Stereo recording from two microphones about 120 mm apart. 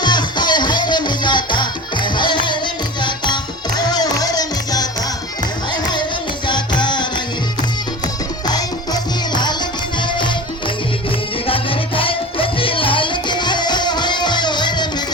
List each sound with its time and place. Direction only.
0.0 s music: 35° left (ahead or behind)
3.8 s music: 35° left (ahead or behind)
6.5 s music: 40° left (ahead or behind)
8.4 s music: 35° left (ahead or behind)
11.4 s music: 50° left (ahead or behind)